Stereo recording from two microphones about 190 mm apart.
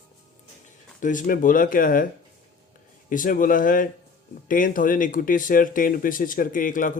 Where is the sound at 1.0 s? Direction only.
45° left (ahead or behind).